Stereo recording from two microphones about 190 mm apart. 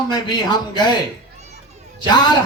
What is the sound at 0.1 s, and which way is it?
Speech, 20° left (ahead or behind).